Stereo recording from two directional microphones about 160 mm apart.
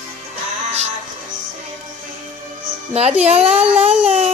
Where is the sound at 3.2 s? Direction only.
40° right (ahead or behind).